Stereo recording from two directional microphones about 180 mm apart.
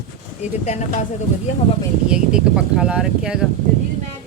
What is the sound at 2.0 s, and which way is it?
A woman's voice, 5° right (ahead or behind).